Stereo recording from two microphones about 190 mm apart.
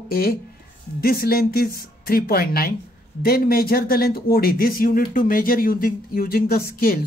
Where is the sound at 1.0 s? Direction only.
55° left (ahead or behind).